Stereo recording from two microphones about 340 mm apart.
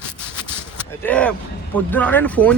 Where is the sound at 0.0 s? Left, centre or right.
Centre.